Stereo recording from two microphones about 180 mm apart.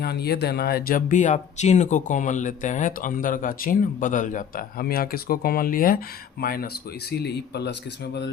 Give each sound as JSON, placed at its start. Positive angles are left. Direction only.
{"t": 0.0, "sound": "speech", "side_deg": 65}
{"t": 7.1, "sound": "speech", "side_deg": 65}